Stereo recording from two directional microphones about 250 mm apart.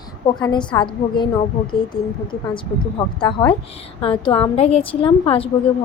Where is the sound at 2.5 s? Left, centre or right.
Centre.